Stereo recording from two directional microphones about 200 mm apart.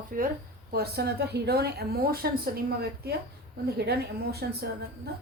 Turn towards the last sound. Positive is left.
turn(degrees=-55)  # may be behind; listen again after turning